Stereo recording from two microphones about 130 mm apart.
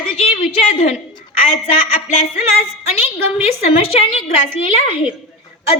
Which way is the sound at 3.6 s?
50° left (ahead or behind).